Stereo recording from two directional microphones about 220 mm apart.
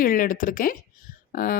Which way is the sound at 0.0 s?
40° left (ahead or behind).